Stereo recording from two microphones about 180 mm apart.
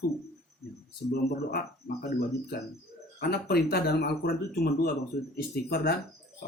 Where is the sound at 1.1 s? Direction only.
55° left (ahead or behind).